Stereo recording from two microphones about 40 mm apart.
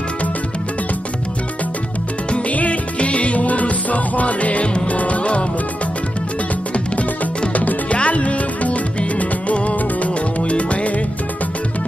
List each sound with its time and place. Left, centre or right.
2.5 s music: left
7.5 s music: left